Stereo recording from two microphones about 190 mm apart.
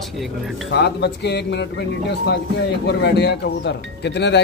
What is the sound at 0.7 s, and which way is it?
A man's voice, 60° left (ahead or behind).